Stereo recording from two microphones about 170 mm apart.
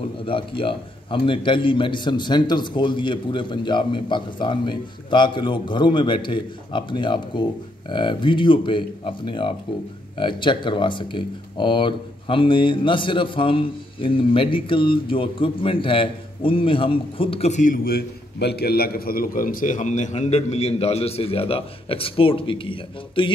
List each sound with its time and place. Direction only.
0.2 s a man's voice: 30° left (ahead or behind)